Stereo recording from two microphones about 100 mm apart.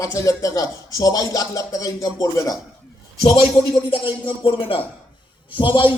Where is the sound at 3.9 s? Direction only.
60° left (ahead or behind).